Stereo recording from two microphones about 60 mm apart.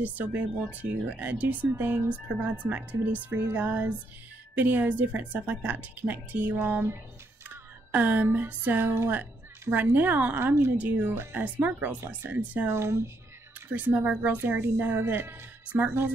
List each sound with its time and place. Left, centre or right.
0.0 s a woman's voice: right
1.7 s a woman's voice: right
6.6 s speech: right
7.4 s speech: right
10.4 s speech: right
10.8 s a woman's voice: right
12.6 s speech: right
13.7 s speech: right